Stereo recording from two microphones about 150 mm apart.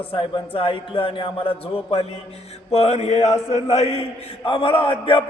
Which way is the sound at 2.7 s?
45° left (ahead or behind).